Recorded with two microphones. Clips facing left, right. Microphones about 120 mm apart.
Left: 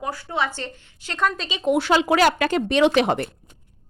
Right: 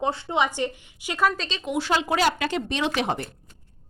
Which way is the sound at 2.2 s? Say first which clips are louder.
Left 4 dB; 55° left (ahead or behind).